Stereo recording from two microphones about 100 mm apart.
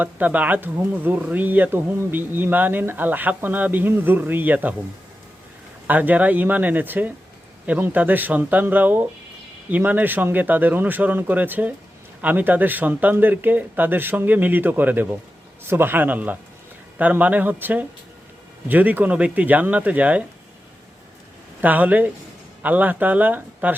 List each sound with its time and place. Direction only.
0.0 s speech: 15° right (ahead or behind)
5.9 s speech: 15° right (ahead or behind)
21.6 s speech: 15° right (ahead or behind)